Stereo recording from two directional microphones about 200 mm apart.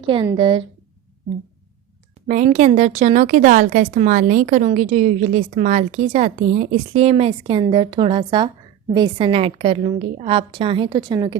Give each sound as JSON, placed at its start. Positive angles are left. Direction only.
{"t": 0.0, "sound": "a woman's voice", "side_deg": -25}
{"t": 2.2, "sound": "speech", "side_deg": -40}